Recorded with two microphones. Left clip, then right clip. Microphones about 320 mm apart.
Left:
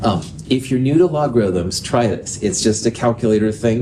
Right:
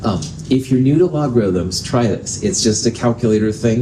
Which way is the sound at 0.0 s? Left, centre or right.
Left.